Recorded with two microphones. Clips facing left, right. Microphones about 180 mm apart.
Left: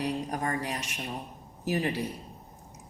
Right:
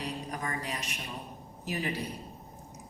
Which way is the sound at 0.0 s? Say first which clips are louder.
Left 6 dB; 40° left (ahead or behind).